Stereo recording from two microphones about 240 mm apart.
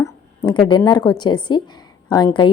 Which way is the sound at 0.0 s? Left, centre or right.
Centre.